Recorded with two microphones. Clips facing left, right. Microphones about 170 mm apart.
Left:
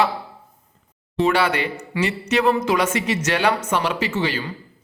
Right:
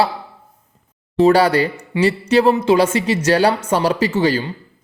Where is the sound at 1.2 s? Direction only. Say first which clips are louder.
Right 7 dB; 35° right (ahead or behind).